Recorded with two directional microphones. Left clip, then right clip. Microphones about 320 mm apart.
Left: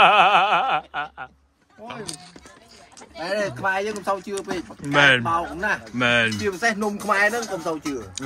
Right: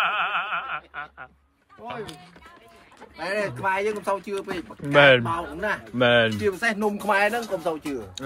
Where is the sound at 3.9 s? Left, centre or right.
Centre.